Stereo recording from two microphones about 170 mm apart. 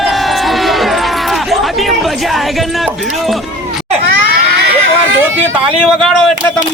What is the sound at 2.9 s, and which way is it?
Music, 5° right (ahead or behind).